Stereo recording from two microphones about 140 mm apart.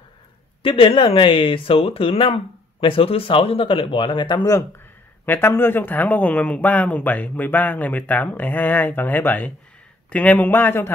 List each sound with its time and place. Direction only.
0.6 s speech: 40° left (ahead or behind)
5.2 s speech: 15° left (ahead or behind)